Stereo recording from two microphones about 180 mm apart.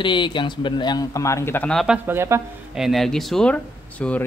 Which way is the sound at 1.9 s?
10° right (ahead or behind).